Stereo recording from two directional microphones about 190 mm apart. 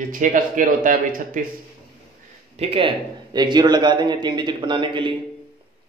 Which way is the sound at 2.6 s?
30° right (ahead or behind).